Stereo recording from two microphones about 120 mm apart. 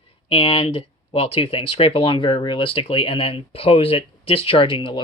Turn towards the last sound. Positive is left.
turn(degrees=45)  # may be behind; listen again after turning